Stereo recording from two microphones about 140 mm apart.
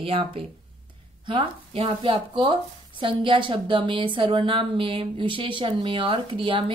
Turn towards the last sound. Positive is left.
turn(degrees=-35)  # may be behind; listen again after turning